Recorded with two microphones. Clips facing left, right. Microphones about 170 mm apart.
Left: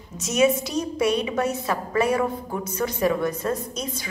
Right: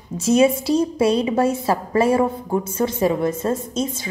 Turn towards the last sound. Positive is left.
turn(degrees=-25)  # may be behind; listen again after turning